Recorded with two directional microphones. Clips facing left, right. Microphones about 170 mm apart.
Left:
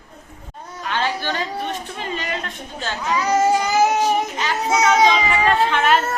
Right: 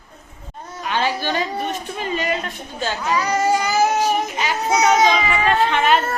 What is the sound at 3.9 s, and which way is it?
Child singing, 10° right (ahead or behind).